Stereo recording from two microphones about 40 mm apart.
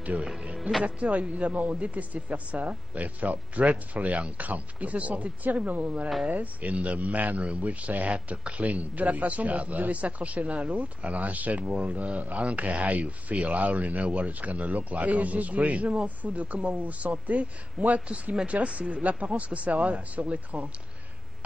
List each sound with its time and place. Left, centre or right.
0.0 s a man's voice: right
0.6 s speech: centre
0.8 s a man's voice: right